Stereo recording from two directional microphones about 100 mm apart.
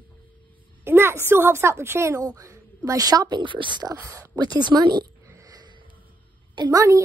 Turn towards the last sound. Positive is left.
turn(degrees=-35)  # may be behind; listen again after turning